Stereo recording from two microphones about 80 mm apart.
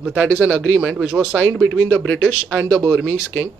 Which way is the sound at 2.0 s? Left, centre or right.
Centre.